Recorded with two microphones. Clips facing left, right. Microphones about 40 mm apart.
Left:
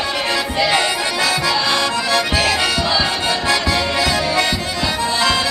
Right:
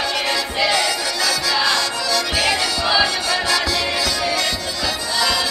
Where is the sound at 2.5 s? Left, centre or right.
Centre.